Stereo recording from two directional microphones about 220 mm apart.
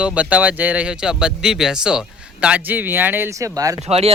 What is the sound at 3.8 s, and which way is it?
Speech, 30° right (ahead or behind).